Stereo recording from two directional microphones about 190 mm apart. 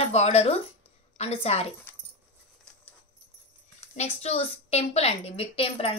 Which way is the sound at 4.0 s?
35° left (ahead or behind).